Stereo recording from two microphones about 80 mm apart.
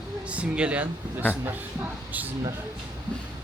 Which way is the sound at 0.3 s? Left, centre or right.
Centre.